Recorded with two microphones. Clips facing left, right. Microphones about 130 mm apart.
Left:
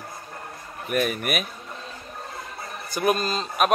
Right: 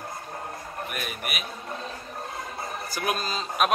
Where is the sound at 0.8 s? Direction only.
45° left (ahead or behind).